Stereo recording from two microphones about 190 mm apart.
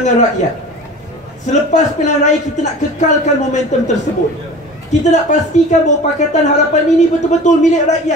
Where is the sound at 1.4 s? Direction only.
40° left (ahead or behind).